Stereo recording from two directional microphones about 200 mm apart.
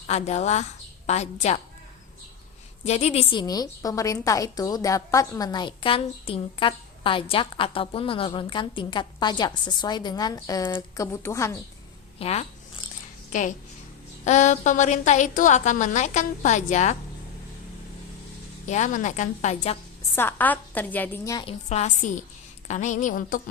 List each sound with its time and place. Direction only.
0.1 s a woman's voice: 35° left (ahead or behind)
2.8 s a woman's voice: 35° left (ahead or behind); by 11.5 s 15° left (ahead or behind)
12.2 s a woman's voice: 30° left (ahead or behind)
18.7 s a woman's voice: 35° left (ahead or behind)
20.1 s a woman's voice: 10° left (ahead or behind)
21.4 s a woman's voice: 35° left (ahead or behind)